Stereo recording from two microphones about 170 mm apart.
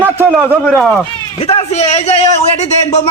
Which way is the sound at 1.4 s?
35° left (ahead or behind).